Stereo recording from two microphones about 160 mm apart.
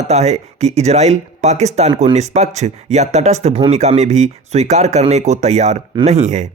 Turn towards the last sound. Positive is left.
turn(degrees=-45)  # may be behind; listen again after turning